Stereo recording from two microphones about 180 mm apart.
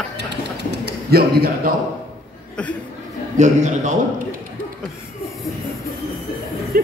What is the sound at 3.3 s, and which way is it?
Speech, 40° right (ahead or behind).